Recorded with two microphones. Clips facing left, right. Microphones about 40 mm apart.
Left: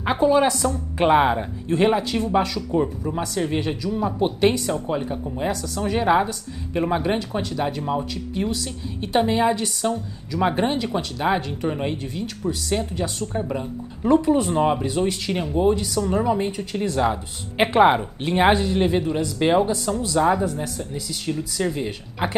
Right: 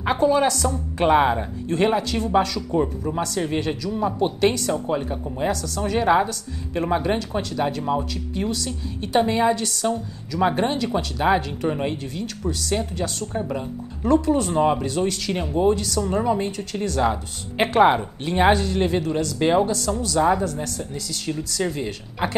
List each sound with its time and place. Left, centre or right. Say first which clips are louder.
0.0 s speech: left 1 dB; centre
5.5 s speech: even; centre
14.0 s speech: left 1 dB; centre